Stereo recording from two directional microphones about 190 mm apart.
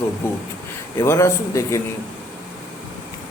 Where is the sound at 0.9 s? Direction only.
15° left (ahead or behind).